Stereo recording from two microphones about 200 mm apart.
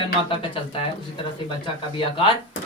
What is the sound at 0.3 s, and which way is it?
Speech, 25° left (ahead or behind).